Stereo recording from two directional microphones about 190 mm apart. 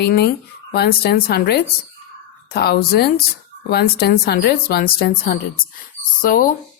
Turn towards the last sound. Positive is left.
turn(degrees=45)  # may be behind; listen again after turning